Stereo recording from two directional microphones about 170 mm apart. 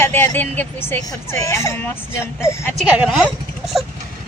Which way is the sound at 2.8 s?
5° right (ahead or behind).